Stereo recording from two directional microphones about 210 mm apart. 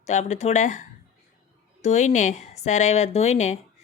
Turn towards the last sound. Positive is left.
turn(degrees=35)  # may be behind; listen again after turning